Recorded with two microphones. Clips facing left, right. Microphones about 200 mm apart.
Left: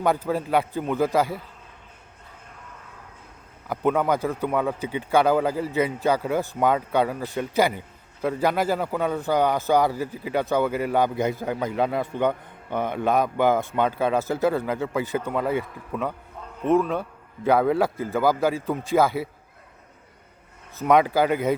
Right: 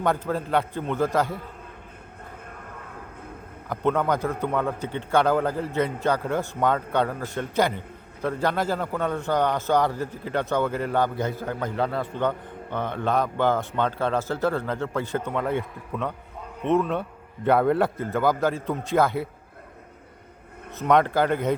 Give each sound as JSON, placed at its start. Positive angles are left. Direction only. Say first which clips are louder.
{"t": 0.3, "sound": "a man's voice", "louder": "left 2 dB", "side_deg": 10}
{"t": 3.7, "sound": "a man's voice", "louder": "left 1 dB", "side_deg": 10}
{"t": 20.8, "sound": "a man's voice", "louder": "left 1 dB", "side_deg": 5}